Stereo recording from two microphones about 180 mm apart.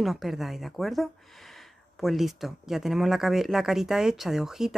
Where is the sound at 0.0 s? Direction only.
Centre (ahead or behind).